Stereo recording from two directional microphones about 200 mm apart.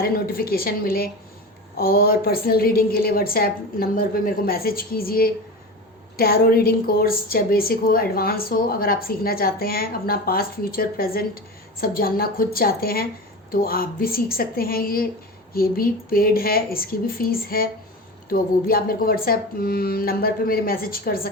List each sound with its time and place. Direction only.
0.0 s a woman's voice: 50° left (ahead or behind)